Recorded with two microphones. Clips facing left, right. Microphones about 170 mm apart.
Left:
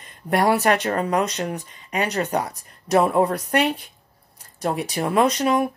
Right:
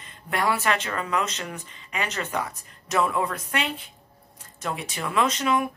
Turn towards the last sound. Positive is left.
turn(degrees=40)  # may be behind; listen again after turning